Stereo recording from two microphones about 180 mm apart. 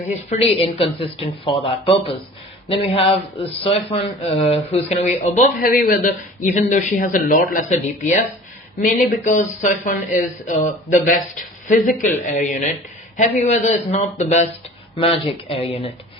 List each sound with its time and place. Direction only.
0.1 s speech: 35° left (ahead or behind)
5.6 s speech: 50° left (ahead or behind)
15.4 s speech: 35° left (ahead or behind)